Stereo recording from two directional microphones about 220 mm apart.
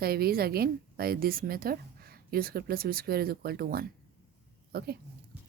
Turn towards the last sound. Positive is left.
turn(degrees=-45)  # may be behind; listen again after turning